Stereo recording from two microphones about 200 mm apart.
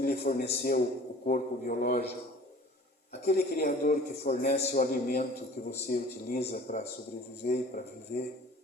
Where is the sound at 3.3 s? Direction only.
50° left (ahead or behind).